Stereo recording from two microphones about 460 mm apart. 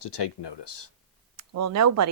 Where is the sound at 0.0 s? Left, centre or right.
Left.